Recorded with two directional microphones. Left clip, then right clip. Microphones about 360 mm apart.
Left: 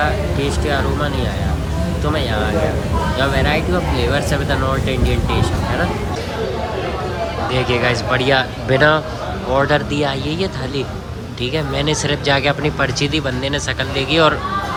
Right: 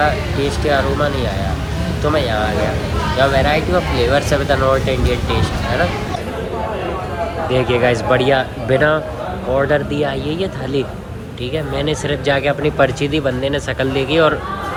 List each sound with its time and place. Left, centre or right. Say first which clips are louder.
0.0 s speech: right 2 dB; centre
7.5 s speech: right 3 dB; centre